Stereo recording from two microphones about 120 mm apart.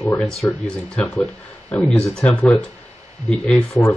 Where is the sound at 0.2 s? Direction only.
5° left (ahead or behind).